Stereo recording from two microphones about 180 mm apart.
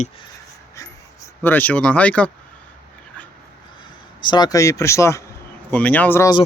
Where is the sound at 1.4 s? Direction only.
10° left (ahead or behind).